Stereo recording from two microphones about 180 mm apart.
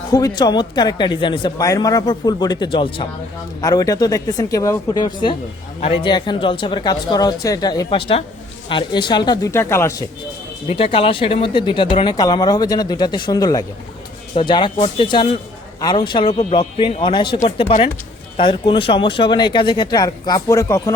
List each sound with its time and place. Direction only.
0.1 s speech: 20° left (ahead or behind)
10.7 s speech: 30° left (ahead or behind); by 20.9 s 15° left (ahead or behind)